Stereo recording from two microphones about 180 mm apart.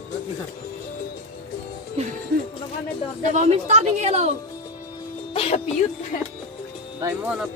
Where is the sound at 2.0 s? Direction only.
35° right (ahead or behind).